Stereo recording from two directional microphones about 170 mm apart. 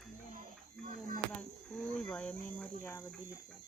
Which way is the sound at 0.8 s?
50° right (ahead or behind).